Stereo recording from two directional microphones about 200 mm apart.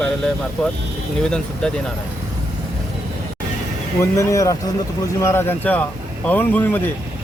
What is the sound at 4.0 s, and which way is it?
Speech, 15° left (ahead or behind).